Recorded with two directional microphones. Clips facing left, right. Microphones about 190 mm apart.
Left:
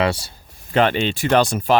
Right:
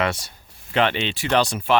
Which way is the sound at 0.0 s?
30° left (ahead or behind).